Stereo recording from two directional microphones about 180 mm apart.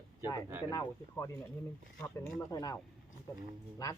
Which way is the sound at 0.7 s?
15° left (ahead or behind).